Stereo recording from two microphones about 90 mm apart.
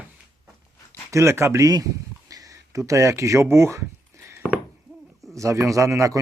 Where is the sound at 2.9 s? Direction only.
35° right (ahead or behind).